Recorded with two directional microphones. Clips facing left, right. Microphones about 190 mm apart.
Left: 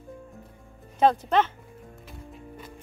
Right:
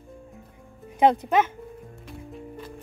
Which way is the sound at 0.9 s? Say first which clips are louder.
Right 1 dB; 20° right (ahead or behind).